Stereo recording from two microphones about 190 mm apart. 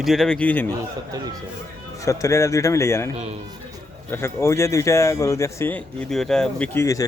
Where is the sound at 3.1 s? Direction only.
35° right (ahead or behind).